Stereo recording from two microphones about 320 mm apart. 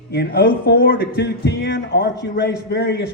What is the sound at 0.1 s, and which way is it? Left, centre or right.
A man's voice, left.